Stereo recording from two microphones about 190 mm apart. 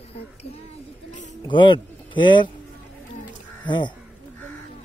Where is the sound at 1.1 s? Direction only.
40° left (ahead or behind).